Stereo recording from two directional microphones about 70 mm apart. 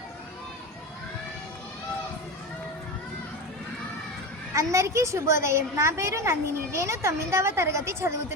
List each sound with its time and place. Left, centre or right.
4.5 s a woman's voice: right